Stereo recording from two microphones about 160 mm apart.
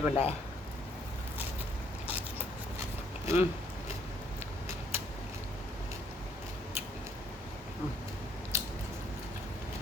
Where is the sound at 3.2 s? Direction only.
15° right (ahead or behind).